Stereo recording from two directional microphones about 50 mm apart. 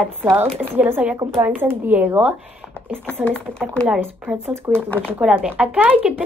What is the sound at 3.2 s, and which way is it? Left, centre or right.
Speech, left.